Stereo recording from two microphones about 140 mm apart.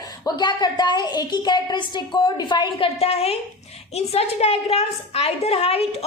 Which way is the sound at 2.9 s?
45° left (ahead or behind).